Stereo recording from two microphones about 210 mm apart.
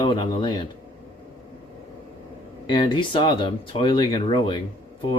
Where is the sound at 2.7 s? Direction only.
25° left (ahead or behind).